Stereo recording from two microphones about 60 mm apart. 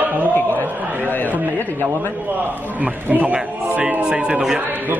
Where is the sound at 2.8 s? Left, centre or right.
Right.